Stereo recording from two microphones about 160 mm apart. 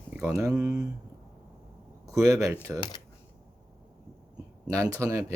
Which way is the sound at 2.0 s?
20° right (ahead or behind).